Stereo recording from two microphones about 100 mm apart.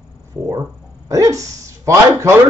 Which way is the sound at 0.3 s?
35° right (ahead or behind).